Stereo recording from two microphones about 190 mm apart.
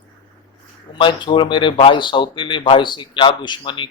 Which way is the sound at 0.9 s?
25° left (ahead or behind).